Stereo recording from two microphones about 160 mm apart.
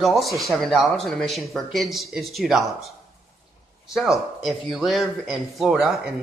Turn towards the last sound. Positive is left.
turn(degrees=-5)  # may be behind; listen again after turning